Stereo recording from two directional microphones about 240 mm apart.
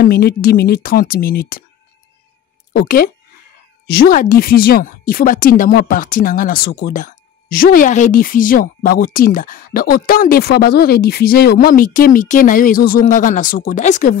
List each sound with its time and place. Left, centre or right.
0.0 s speech: left
2.7 s speech: left